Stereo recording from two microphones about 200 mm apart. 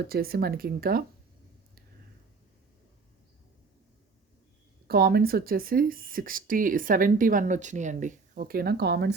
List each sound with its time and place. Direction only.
0.1 s speech: 50° right (ahead or behind)
4.9 s speech: 50° right (ahead or behind)